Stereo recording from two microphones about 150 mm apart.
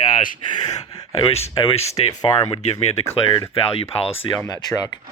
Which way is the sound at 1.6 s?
45° left (ahead or behind).